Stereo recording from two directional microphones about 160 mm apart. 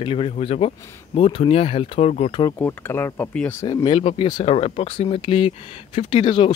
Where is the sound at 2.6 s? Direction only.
15° left (ahead or behind).